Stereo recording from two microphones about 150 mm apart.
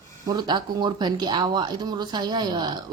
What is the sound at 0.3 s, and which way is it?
Speech, 30° right (ahead or behind).